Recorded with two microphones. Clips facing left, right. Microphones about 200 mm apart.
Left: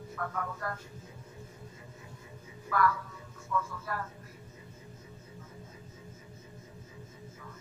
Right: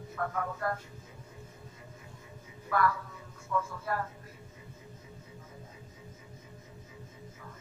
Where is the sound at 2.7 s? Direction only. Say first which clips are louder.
Even; 30° right (ahead or behind).